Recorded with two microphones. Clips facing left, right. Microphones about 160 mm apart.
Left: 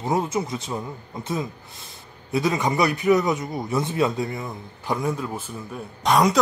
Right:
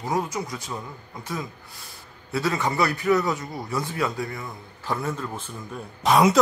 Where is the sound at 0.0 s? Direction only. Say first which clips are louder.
Left 3 dB; 25° left (ahead or behind); by 5.5 s 10° left (ahead or behind).